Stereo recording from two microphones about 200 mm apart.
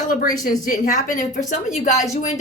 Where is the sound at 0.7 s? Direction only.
40° left (ahead or behind).